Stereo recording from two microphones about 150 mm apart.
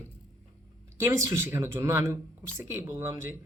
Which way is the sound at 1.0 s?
20° right (ahead or behind).